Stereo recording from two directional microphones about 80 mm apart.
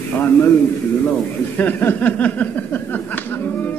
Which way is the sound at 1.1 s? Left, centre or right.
Left.